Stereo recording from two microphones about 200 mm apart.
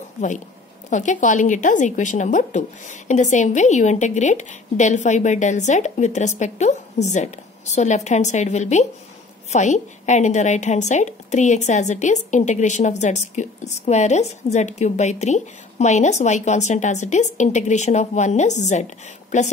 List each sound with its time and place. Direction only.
0.8 s speech: 40° left (ahead or behind)